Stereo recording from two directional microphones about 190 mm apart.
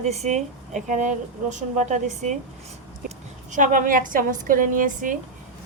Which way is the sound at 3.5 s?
45° right (ahead or behind).